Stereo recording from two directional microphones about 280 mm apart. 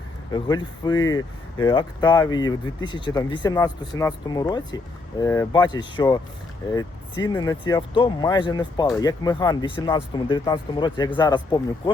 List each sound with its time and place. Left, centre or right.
0.3 s speech: centre